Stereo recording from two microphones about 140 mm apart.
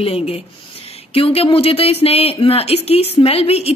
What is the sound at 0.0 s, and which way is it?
Speech, 45° left (ahead or behind).